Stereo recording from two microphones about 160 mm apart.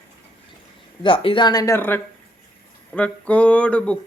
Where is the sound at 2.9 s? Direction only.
10° left (ahead or behind).